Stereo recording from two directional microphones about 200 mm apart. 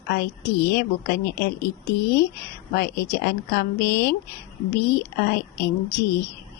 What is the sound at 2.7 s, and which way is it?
A woman's voice, 50° left (ahead or behind).